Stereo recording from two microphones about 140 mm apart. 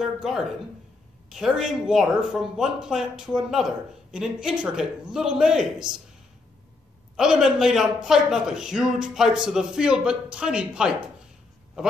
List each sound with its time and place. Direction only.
0.0 s speech: 5° right (ahead or behind)
7.2 s speech: 5° right (ahead or behind)